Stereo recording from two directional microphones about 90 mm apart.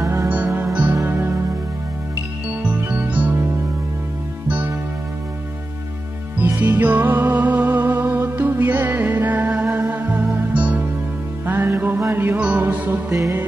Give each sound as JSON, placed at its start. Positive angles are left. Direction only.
{"t": 0.0, "sound": "music", "side_deg": -35}
{"t": 0.3, "sound": "music", "side_deg": -20}
{"t": 2.9, "sound": "music", "side_deg": -20}
{"t": 4.5, "sound": "music", "side_deg": -20}
{"t": 6.4, "sound": "music", "side_deg": -20}
{"t": 13.1, "sound": "music", "side_deg": -30}